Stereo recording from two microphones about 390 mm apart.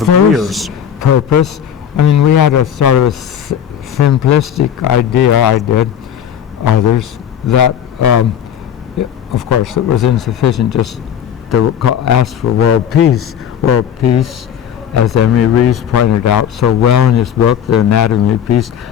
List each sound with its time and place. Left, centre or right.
0.0 s a man's voice: centre
2.0 s a man's voice: left
6.7 s a man's voice: left